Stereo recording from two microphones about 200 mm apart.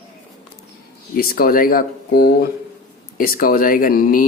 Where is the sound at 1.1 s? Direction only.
45° left (ahead or behind).